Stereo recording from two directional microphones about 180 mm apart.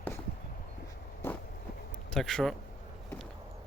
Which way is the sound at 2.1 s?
Centre (ahead or behind).